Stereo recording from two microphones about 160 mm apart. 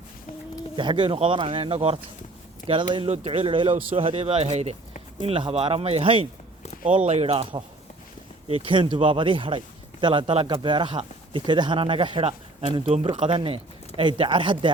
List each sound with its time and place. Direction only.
0.8 s a man's voice: 30° right (ahead or behind)